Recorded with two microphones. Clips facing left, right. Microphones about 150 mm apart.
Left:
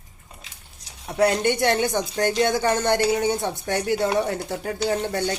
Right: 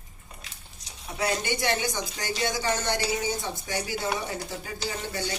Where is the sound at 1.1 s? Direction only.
55° left (ahead or behind).